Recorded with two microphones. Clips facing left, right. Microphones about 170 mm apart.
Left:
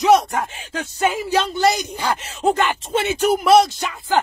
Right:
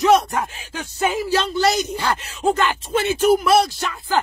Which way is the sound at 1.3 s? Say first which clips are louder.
Left 1 dB; 15° left (ahead or behind).